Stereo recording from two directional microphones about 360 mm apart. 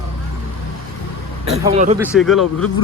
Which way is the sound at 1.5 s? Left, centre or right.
Centre.